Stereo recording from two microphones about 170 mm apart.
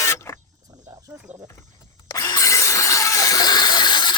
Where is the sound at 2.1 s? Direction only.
20° left (ahead or behind).